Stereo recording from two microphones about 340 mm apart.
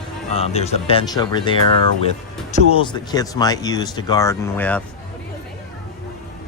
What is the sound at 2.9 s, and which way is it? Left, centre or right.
Speech, centre.